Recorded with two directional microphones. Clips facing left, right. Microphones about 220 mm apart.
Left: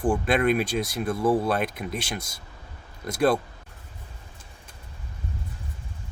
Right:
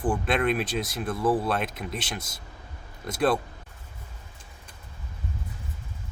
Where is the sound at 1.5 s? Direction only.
Centre (ahead or behind).